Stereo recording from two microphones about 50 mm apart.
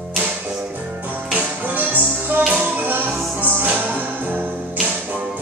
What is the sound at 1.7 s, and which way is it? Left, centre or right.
Music, right.